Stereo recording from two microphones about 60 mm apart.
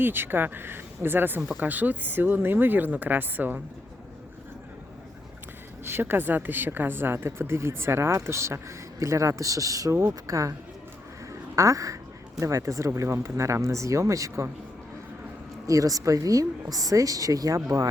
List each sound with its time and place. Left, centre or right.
0.0 s speech: right
5.8 s a woman's voice: right
11.3 s quack: right
12.4 s speech: right
15.6 s a woman's voice: right